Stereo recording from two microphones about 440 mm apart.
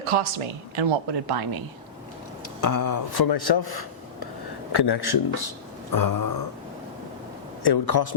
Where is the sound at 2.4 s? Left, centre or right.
Left.